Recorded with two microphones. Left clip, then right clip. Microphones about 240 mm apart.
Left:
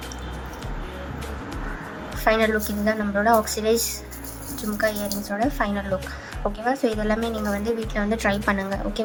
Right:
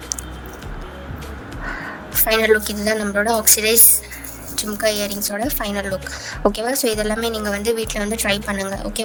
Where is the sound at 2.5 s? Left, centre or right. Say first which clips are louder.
Right 7 dB; right.